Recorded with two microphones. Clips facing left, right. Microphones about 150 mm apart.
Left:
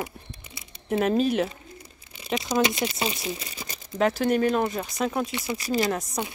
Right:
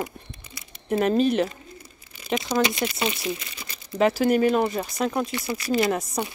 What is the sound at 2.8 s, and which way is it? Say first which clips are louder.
Speech: right 2 dB; 30° left (ahead or behind).